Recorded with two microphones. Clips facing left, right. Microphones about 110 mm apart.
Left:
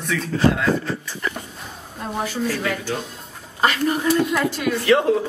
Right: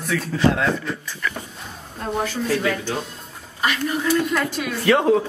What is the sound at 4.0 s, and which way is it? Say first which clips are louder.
Speech: even; 20° left (ahead or behind).